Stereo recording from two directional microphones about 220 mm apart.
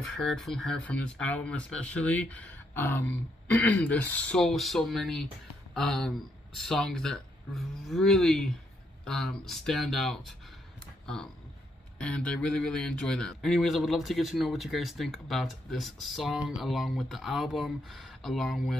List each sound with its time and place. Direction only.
0.0 s speech: centre (ahead or behind)
12.0 s speech: 5° left (ahead or behind)